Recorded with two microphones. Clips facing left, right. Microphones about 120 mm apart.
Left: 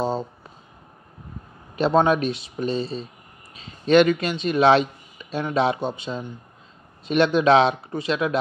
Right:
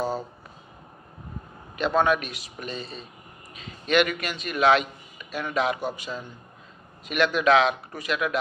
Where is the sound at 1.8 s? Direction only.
30° left (ahead or behind).